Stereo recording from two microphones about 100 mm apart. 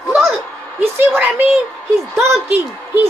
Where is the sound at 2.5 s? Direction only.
20° right (ahead or behind).